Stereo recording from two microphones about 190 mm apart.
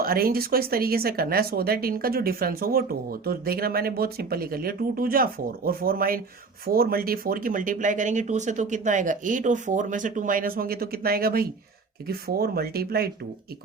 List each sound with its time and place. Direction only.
0.0 s speech: 50° right (ahead or behind)